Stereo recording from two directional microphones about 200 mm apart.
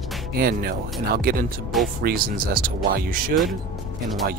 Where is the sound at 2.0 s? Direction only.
45° right (ahead or behind).